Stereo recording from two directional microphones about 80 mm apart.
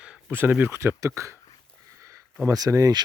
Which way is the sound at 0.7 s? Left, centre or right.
Right.